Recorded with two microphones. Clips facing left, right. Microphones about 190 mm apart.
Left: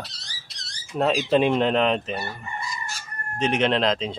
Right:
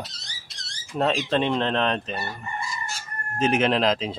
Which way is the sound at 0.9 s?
5° left (ahead or behind).